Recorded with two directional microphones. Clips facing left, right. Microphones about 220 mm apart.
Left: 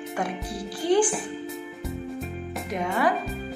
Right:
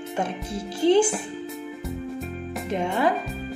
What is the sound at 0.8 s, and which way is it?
Music, 25° right (ahead or behind).